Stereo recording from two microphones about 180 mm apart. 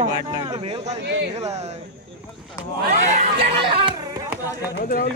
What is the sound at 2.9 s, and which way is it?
Speech, 30° right (ahead or behind).